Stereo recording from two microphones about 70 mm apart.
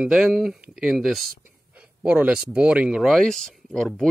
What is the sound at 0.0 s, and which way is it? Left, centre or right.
Speech, centre.